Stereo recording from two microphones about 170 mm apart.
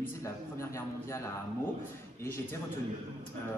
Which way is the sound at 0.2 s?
15° left (ahead or behind).